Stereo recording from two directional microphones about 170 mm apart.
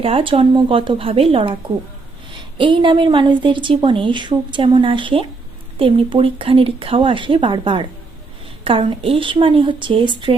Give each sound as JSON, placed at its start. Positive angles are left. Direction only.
{"t": 0.0, "sound": "a woman's voice", "side_deg": -30}